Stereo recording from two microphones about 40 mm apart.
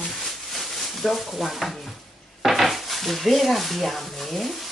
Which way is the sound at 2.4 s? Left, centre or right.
Centre.